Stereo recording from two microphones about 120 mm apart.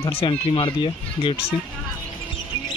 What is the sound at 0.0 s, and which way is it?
Speech, 50° left (ahead or behind).